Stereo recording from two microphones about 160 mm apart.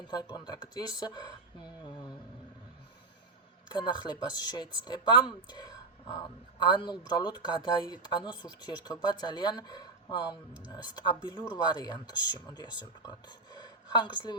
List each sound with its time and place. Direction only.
0.1 s speech: 25° left (ahead or behind)
3.7 s speech: 30° left (ahead or behind)